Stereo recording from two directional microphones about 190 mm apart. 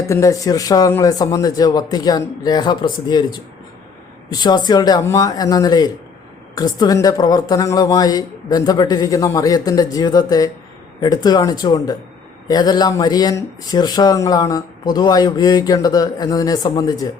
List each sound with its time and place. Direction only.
0.0 s speech: 15° left (ahead or behind)